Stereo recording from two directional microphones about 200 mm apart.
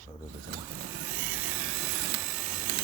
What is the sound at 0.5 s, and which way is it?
Vehicle, 45° right (ahead or behind).